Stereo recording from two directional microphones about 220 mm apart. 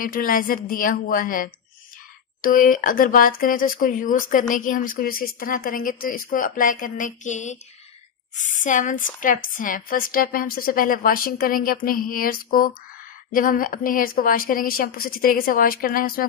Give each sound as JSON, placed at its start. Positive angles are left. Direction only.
{"t": 0.0, "sound": "a woman's voice", "side_deg": 40}